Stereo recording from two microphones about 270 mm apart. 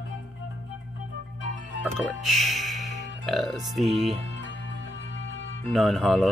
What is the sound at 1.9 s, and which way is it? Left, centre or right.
Speech, centre.